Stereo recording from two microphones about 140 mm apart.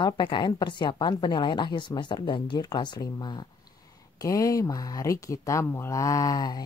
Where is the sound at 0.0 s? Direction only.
35° left (ahead or behind).